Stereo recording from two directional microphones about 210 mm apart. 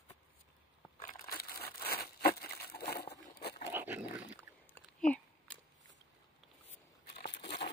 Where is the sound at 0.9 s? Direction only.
40° left (ahead or behind).